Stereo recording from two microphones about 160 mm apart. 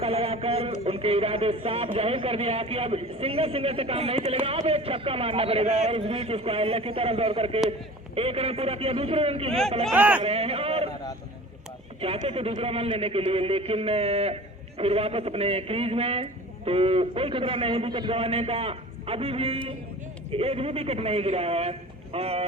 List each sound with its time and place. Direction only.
0.0 s speech: 40° right (ahead or behind)
9.9 s speech: 10° right (ahead or behind)
10.2 s a man's voice: 40° right (ahead or behind)
11.9 s speech: 35° right (ahead or behind)